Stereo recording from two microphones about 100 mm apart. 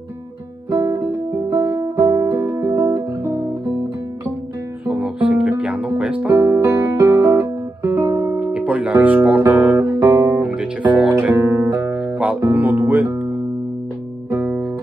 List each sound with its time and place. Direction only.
0.7 s music: 40° right (ahead or behind)
4.8 s music: 15° right (ahead or behind)
6.3 s music: 30° right (ahead or behind)
8.4 s guitar: 10° right (ahead or behind)
9.8 s guitar: 30° right (ahead or behind)
10.3 s music: 15° right (ahead or behind)
11.3 s music: 30° right (ahead or behind)
12.1 s music: 15° right (ahead or behind)
14.3 s music: 15° right (ahead or behind)